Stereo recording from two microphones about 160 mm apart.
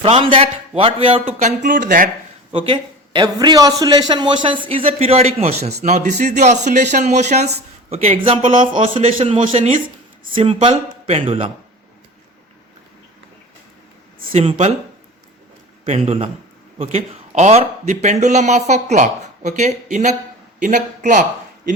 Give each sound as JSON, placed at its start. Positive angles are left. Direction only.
{"t": 0.0, "sound": "a man's voice", "side_deg": -35}
{"t": 1.4, "sound": "speech", "side_deg": -55}
{"t": 2.5, "sound": "a man's voice", "side_deg": -30}
{"t": 15.9, "sound": "a man's voice", "side_deg": -35}